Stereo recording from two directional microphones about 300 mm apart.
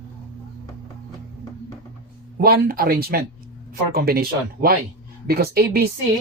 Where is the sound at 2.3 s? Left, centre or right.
Right.